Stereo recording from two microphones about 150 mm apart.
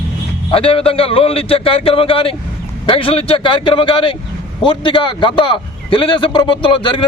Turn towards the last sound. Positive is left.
turn(degrees=35)  # may be behind; listen again after turning